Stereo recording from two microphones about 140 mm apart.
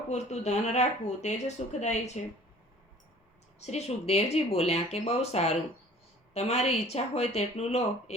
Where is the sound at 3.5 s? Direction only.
50° left (ahead or behind).